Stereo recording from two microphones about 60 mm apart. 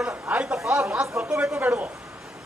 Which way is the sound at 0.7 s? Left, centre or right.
Centre.